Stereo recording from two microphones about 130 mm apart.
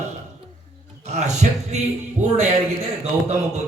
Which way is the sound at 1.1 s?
60° right (ahead or behind).